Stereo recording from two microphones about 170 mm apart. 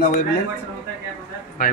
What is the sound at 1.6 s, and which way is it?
Speech, 60° left (ahead or behind).